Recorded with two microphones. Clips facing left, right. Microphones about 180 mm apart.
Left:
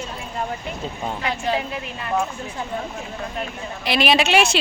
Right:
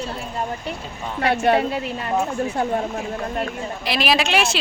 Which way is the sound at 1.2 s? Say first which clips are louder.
Right 7 dB; 65° right (ahead or behind).